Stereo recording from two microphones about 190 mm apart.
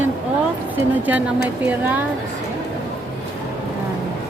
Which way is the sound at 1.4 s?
10° right (ahead or behind).